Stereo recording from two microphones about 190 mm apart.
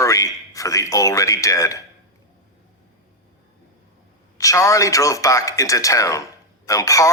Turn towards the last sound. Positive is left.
turn(degrees=15)  # may be behind; listen again after turning